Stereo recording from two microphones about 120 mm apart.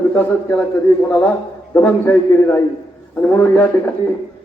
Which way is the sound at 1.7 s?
15° left (ahead or behind).